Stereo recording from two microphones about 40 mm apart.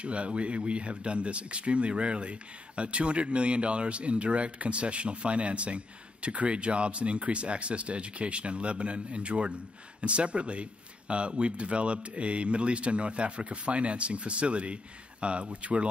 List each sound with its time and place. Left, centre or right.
0.0 s speech: right